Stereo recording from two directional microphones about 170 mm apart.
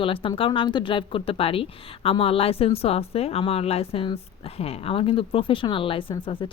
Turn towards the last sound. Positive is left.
turn(degrees=30)  # may be behind; listen again after turning